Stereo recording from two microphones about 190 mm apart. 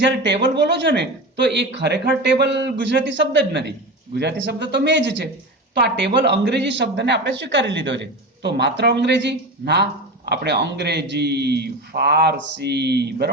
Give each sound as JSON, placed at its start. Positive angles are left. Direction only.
{"t": 0.0, "sound": "speech", "side_deg": -65}